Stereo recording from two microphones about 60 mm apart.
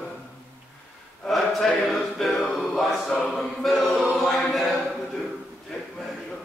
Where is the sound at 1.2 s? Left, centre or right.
Centre.